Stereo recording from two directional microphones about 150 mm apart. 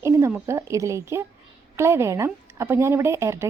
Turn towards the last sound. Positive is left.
turn(degrees=-20)  # may be behind; listen again after turning